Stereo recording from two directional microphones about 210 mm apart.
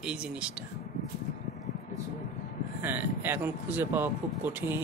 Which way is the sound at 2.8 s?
10° right (ahead or behind).